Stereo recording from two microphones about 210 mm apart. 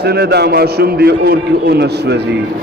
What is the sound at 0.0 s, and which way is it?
A man's voice, 50° right (ahead or behind).